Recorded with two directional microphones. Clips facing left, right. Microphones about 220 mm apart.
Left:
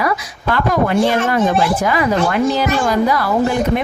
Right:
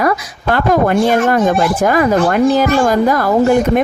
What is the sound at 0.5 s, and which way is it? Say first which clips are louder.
A woman's voice: right 3 dB; 50° right (ahead or behind).